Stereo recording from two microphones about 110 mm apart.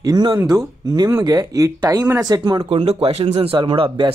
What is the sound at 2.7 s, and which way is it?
Speech, 65° right (ahead or behind).